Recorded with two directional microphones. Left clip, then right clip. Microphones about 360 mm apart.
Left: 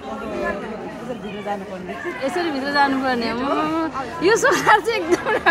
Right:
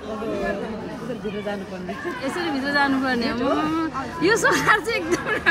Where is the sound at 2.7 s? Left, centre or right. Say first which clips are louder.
Left 3 dB; centre.